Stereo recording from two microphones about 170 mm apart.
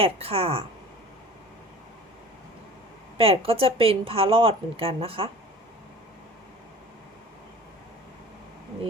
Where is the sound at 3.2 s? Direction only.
35° right (ahead or behind).